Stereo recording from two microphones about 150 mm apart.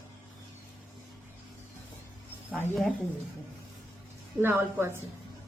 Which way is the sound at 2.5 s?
5° left (ahead or behind).